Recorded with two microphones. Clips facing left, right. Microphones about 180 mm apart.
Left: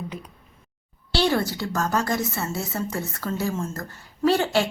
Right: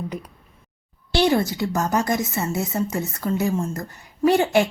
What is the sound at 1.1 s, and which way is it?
A woman's voice, 20° right (ahead or behind).